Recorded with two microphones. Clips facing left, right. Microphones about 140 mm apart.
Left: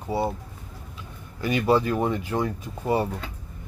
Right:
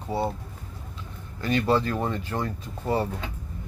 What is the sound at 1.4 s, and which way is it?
Speech, 10° left (ahead or behind).